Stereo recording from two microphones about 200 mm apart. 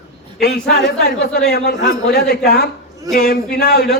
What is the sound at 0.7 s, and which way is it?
A man's voice, 50° left (ahead or behind).